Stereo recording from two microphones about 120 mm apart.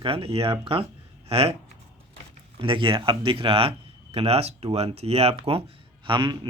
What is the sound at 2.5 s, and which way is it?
Speech, 45° right (ahead or behind).